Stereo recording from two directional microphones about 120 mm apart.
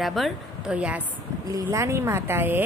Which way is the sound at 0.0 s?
Centre (ahead or behind).